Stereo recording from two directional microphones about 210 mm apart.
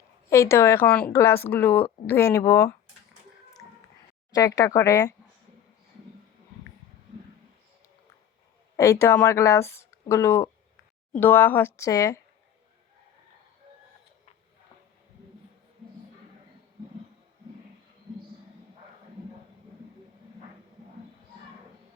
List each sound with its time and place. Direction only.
0.3 s speech: 10° left (ahead or behind)
4.3 s speech: 15° left (ahead or behind)
8.7 s speech: 15° left (ahead or behind)